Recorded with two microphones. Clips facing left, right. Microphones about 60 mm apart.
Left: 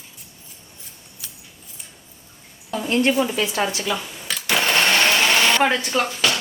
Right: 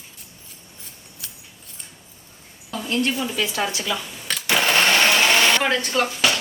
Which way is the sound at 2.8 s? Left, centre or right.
Left.